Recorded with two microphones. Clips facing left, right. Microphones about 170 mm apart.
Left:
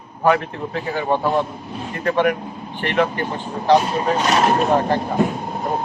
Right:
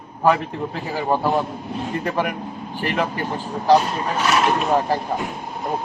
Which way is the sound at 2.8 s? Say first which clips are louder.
Left 3 dB; 5° right (ahead or behind).